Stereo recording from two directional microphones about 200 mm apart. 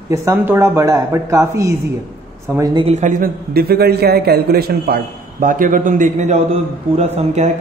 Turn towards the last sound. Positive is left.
turn(degrees=-35)  # may be behind; listen again after turning